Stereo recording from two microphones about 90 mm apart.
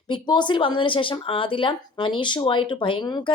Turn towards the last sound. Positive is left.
turn(degrees=50)  # may be behind; listen again after turning